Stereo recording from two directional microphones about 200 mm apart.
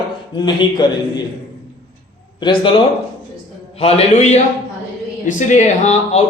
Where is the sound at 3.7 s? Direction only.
30° left (ahead or behind).